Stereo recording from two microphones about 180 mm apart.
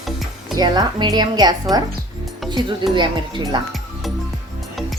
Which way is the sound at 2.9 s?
25° right (ahead or behind).